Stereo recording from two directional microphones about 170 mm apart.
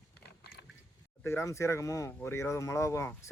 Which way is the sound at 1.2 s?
15° left (ahead or behind).